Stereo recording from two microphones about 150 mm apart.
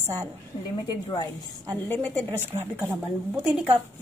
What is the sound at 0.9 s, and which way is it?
Speech, 30° left (ahead or behind).